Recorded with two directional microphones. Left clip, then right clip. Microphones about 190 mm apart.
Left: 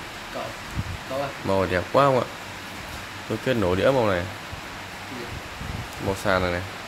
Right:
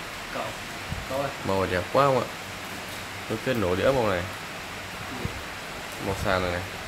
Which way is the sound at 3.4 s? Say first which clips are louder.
Left 3 dB; 20° left (ahead or behind).